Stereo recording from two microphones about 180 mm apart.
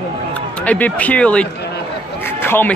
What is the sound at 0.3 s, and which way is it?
Speech, 10° left (ahead or behind).